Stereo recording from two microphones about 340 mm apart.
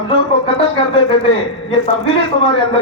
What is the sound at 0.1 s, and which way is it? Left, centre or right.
A man's voice, centre.